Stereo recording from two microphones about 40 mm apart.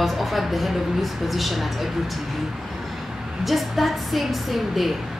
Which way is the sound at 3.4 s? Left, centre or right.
Centre.